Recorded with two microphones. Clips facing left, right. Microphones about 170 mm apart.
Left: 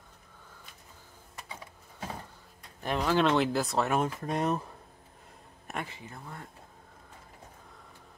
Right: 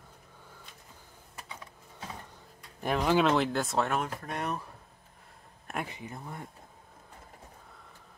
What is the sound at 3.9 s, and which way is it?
Speech, 20° left (ahead or behind).